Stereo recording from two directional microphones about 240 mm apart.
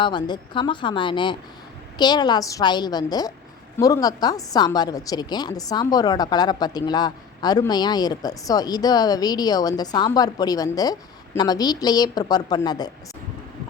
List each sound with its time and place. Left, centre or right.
0.0 s a woman's voice: centre